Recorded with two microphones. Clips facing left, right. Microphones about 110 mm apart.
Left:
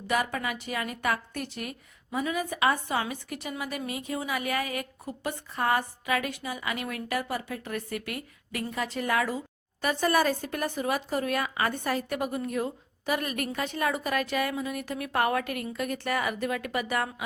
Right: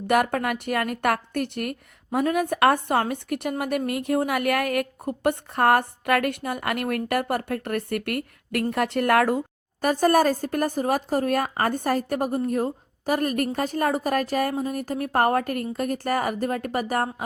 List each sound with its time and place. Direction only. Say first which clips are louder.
0.1 s a woman's voice: right 7 dB; 60° right (ahead or behind)
9.8 s a woman's voice: right 6 dB; 45° right (ahead or behind)